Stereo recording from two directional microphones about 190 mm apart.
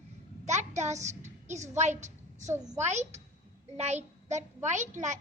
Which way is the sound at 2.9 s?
35° right (ahead or behind).